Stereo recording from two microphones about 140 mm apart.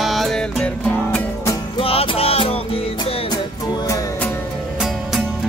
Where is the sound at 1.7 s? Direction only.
40° left (ahead or behind).